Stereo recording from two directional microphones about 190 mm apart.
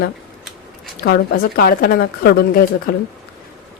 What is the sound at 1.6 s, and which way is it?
A woman's voice, 55° left (ahead or behind).